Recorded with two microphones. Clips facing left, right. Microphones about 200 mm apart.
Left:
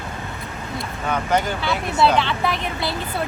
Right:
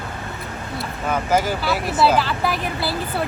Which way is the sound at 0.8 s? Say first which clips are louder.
Right 1 dB; 5° right (ahead or behind).